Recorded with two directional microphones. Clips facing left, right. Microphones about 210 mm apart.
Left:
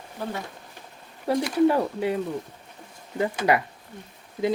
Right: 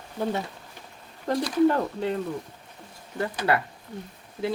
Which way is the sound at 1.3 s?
10° left (ahead or behind).